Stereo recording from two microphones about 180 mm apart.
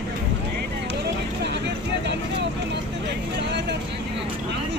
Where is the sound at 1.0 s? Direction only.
70° right (ahead or behind).